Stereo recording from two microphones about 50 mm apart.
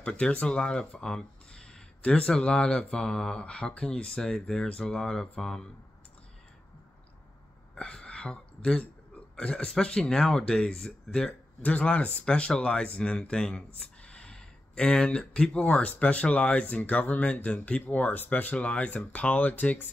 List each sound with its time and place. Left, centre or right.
0.0 s speech: left
7.7 s a sound: centre
9.4 s speech: centre
11.2 s speech: left